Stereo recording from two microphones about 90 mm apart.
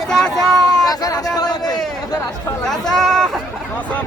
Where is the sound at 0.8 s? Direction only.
45° left (ahead or behind).